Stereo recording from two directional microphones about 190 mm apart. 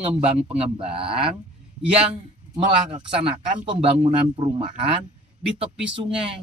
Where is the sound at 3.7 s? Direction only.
30° right (ahead or behind).